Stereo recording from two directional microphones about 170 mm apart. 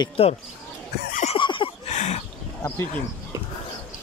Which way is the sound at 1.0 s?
55° left (ahead or behind).